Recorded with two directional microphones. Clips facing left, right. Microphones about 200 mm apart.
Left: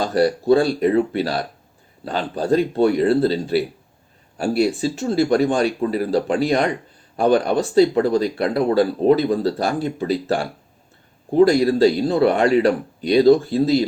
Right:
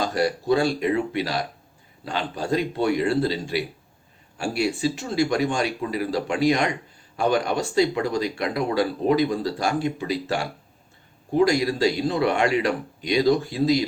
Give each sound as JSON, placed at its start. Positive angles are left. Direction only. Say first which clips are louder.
{"t": 0.1, "sound": "speech", "louder": "left 6 dB", "side_deg": 35}